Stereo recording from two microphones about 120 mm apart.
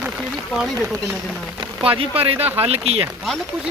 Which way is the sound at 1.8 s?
50° right (ahead or behind).